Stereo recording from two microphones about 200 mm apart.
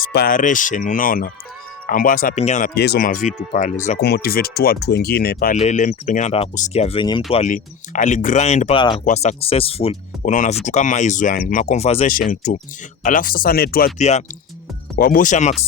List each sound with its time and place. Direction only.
0.0 s speech: 50° left (ahead or behind)
2.7 s speech: 55° left (ahead or behind); by 3.8 s 35° left (ahead or behind)
3.9 s speech: 50° left (ahead or behind)
5.5 s speech: 35° left (ahead or behind)
12.0 s speech: 45° left (ahead or behind)
14.0 s speech: 35° left (ahead or behind)